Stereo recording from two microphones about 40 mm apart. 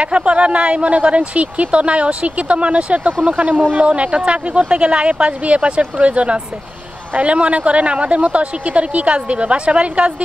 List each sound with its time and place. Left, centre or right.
0.0 s speech: right